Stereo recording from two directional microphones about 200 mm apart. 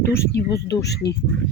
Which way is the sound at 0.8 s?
55° left (ahead or behind).